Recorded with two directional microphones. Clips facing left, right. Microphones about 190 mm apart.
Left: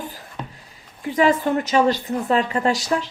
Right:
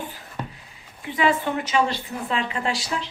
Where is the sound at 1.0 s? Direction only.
40° left (ahead or behind).